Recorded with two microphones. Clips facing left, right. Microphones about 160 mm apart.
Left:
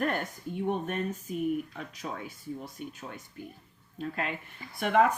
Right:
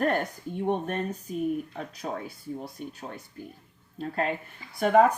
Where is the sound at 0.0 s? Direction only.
40° right (ahead or behind).